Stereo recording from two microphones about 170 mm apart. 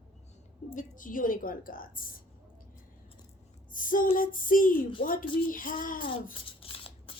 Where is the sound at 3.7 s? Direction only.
50° left (ahead or behind).